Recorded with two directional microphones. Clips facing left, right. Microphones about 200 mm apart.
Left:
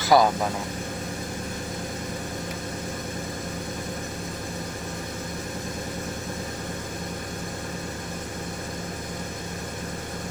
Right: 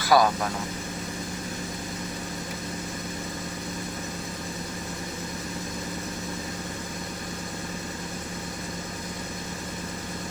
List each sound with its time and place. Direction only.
0.0 s speech: 20° left (ahead or behind)